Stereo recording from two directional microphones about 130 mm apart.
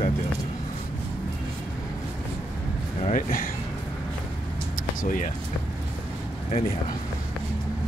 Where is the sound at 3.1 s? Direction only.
90° left.